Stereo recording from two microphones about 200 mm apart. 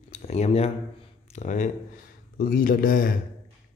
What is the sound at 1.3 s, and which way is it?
Speech, 35° left (ahead or behind).